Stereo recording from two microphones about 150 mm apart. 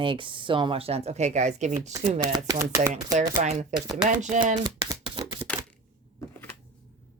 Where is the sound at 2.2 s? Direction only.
25° right (ahead or behind).